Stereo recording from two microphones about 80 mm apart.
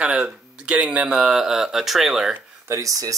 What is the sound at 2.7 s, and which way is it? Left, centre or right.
Speech, right.